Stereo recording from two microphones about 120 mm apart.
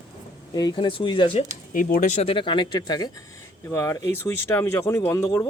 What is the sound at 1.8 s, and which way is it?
Speech, 80° left.